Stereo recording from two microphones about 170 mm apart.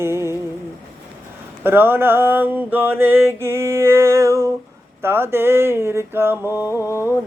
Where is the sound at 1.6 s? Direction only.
10° right (ahead or behind).